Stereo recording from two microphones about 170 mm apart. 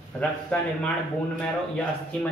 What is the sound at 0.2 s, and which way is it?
Speech, 5° left (ahead or behind).